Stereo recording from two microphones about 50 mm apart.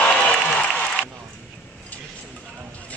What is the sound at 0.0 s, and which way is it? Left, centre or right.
Applause, left.